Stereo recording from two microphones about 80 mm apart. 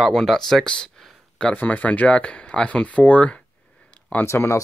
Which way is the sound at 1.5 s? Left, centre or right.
Centre.